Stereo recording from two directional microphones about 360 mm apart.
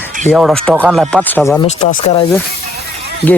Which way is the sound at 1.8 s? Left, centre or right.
Centre.